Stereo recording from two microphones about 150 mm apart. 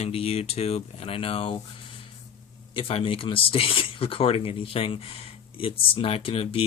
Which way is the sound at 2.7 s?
40° left (ahead or behind).